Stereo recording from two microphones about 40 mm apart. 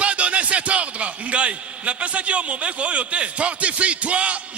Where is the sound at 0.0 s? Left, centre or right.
Right.